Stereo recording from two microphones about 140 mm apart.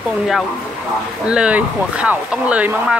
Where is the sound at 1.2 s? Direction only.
10° right (ahead or behind).